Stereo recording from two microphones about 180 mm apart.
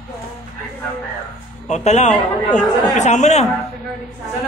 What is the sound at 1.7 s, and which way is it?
Speech, 40° left (ahead or behind).